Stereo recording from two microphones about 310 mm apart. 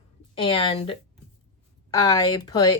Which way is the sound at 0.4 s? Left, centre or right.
Centre.